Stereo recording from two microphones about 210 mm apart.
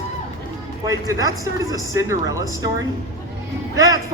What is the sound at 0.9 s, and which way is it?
A man's voice, 15° right (ahead or behind).